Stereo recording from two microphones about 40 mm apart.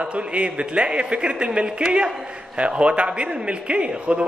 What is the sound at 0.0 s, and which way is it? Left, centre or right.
A man's voice, right.